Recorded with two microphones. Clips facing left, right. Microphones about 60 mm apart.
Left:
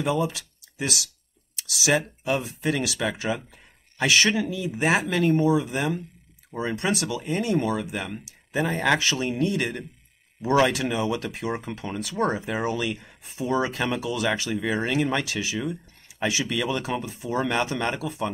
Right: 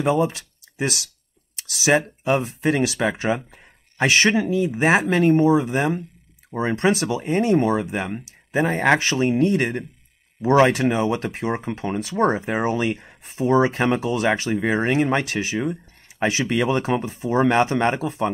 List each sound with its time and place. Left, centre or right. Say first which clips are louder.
0.0 s speech: right 5 dB; right